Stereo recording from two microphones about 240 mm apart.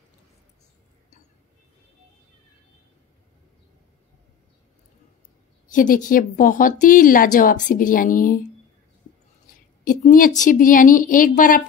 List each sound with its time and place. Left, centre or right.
5.7 s a woman's voice: left
9.5 s a woman's voice: left